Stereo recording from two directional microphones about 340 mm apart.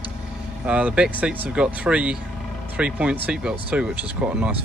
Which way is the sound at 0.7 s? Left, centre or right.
Centre.